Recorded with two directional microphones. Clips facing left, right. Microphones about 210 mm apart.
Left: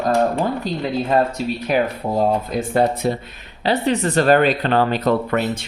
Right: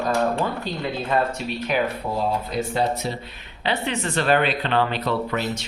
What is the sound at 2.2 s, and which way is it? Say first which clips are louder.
Speech: left 6 dB; 50° left (ahead or behind).